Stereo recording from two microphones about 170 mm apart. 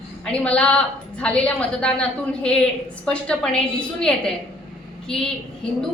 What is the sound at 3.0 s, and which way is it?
A woman's voice, 5° left (ahead or behind).